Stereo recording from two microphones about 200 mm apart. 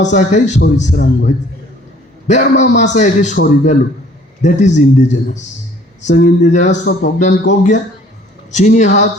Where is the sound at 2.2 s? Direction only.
35° left (ahead or behind).